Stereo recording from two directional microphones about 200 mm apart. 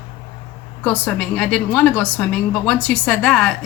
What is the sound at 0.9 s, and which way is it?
A woman's voice, 5° left (ahead or behind).